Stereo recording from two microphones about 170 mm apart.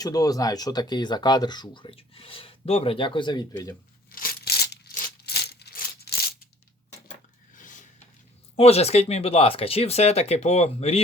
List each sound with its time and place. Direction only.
0.0 s speech: 20° left (ahead or behind)
4.1 s coin: 60° left (ahead or behind)
7.5 s a sound: 50° left (ahead or behind)
8.5 s speech: 40° left (ahead or behind)